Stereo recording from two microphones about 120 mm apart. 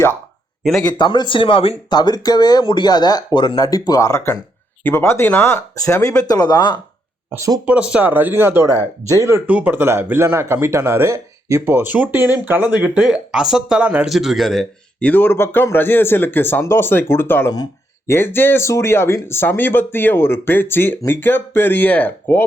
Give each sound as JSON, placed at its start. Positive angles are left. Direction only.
{"t": 0.6, "sound": "speech", "side_deg": 0}
{"t": 0.9, "sound": "speech", "side_deg": 40}
{"t": 7.3, "sound": "speech", "side_deg": -25}
{"t": 7.6, "sound": "speech", "side_deg": -10}
{"t": 9.5, "sound": "speech", "side_deg": -15}
{"t": 15.1, "sound": "speech", "side_deg": 15}